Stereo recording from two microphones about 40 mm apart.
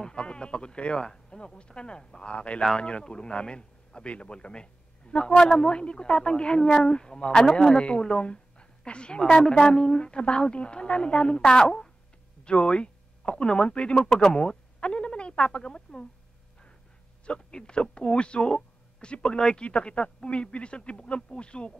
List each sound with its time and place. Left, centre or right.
0.0 s speech: left
14.8 s a sound: left
15.5 s speech: left
17.3 s speech: left